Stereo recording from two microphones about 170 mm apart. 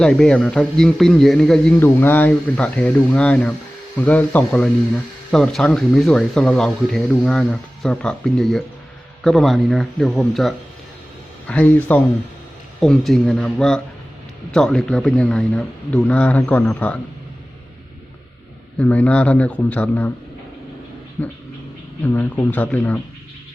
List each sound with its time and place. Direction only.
0.0 s a man's voice: 5° left (ahead or behind)
18.8 s a man's voice: 10° left (ahead or behind)
21.2 s a man's voice: 10° left (ahead or behind)